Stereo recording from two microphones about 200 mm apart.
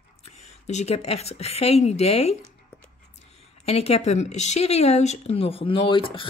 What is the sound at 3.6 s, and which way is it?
Speech, 30° left (ahead or behind).